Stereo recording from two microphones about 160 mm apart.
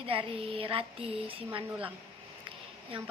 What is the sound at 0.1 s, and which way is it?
Speech, 35° right (ahead or behind).